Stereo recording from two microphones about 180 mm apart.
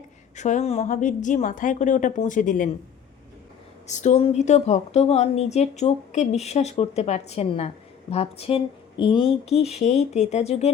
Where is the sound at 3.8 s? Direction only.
40° left (ahead or behind).